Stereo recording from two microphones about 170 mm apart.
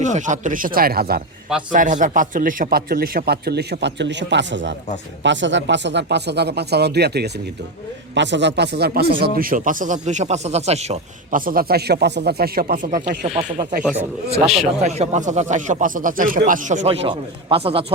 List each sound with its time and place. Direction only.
0.0 s speech: 45° right (ahead or behind); by 1.2 s 65° right (ahead or behind)
1.7 s a man's voice: 50° right (ahead or behind); by 7.3 s 75° right (ahead or behind)
8.1 s speech: 90° right; by 9.3 s 65° right (ahead or behind)
9.4 s speech: 55° right (ahead or behind)
14.5 s speech: centre (ahead or behind)
14.8 s speech: 40° right (ahead or behind)